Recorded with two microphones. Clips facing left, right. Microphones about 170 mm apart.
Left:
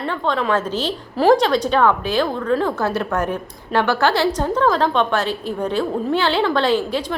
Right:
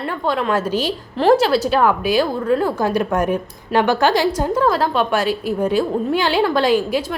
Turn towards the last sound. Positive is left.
turn(degrees=-10)  # may be behind; listen again after turning